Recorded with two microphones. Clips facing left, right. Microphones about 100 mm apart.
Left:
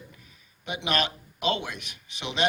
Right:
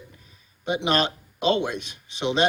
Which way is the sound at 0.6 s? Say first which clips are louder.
Right 5 dB; 30° right (ahead or behind).